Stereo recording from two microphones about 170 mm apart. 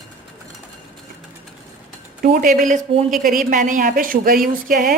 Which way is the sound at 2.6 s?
50° right (ahead or behind).